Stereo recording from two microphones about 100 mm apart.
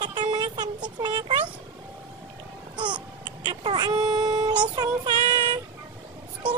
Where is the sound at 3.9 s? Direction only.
45° right (ahead or behind).